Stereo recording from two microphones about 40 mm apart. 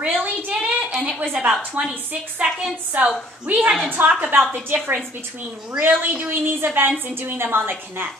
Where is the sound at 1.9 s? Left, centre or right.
Right.